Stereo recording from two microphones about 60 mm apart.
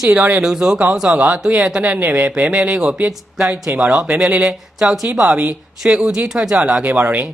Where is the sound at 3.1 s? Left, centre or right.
Centre.